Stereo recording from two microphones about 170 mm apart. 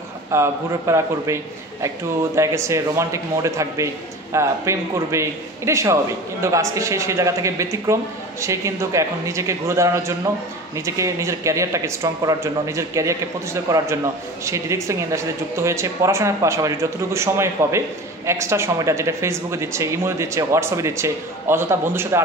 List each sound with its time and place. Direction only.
0.3 s speech: 15° right (ahead or behind)